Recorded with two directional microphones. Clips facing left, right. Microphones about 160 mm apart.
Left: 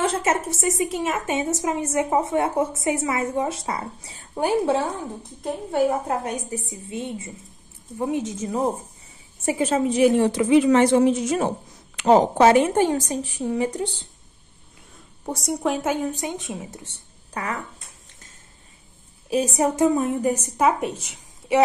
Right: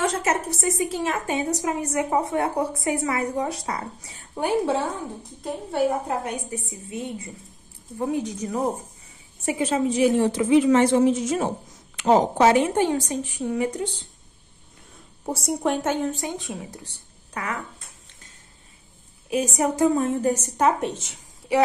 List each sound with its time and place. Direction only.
0.0 s a woman's voice: 25° left (ahead or behind)
5.7 s a woman's voice: 45° left (ahead or behind)
6.9 s a woman's voice: 25° left (ahead or behind)
9.5 s a woman's voice: 45° left (ahead or behind)
10.3 s speech: 70° left (ahead or behind)
12.0 s a woman's voice: 60° left (ahead or behind); by 13.9 s 30° left (ahead or behind)
15.2 s speech: centre (ahead or behind); by 17.4 s 25° left (ahead or behind)
19.3 s a woman's voice: 30° left (ahead or behind)